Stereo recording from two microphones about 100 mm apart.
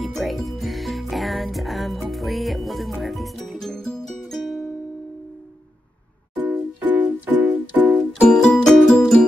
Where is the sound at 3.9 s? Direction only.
Centre (ahead or behind).